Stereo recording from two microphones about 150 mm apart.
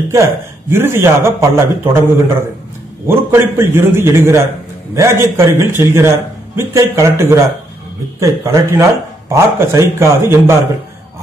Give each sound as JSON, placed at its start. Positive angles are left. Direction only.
{"t": 0.1, "sound": "a man's voice", "side_deg": -15}